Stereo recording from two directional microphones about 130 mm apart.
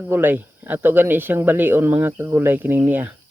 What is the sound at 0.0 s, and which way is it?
Speech, 15° right (ahead or behind).